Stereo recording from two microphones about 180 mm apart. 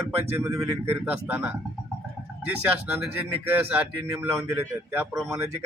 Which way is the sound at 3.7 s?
15° right (ahead or behind).